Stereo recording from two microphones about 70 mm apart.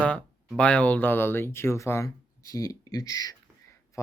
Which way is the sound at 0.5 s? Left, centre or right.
Centre.